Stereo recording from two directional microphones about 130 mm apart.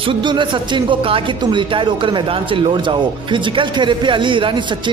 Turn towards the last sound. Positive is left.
turn(degrees=-40)  # may be behind; listen again after turning